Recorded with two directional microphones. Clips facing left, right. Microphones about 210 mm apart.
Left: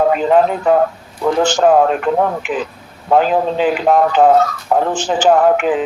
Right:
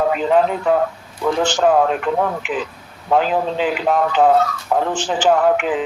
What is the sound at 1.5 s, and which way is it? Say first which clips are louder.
Speech: left 3 dB; 45° left (ahead or behind).